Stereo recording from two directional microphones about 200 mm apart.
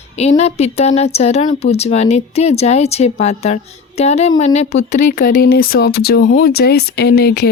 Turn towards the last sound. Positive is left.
turn(degrees=55)  # may be behind; listen again after turning